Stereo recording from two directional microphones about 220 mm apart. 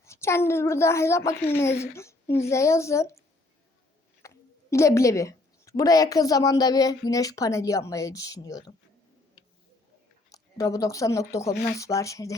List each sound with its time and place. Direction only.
0.0 s a woman's voice: 10° left (ahead or behind)
4.2 s a sound: 15° left (ahead or behind)
4.7 s a woman's voice: 15° left (ahead or behind)
10.3 s a woman's voice: 15° left (ahead or behind)